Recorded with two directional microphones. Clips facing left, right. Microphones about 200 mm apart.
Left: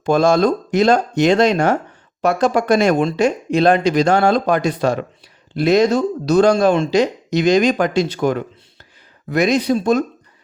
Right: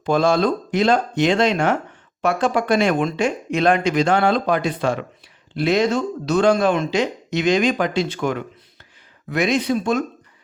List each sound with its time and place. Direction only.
0.0 s speech: 45° left (ahead or behind)